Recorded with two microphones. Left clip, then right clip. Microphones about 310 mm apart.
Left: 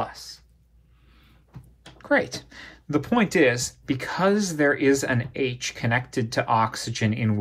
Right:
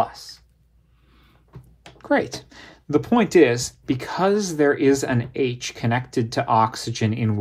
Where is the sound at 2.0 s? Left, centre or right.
Right.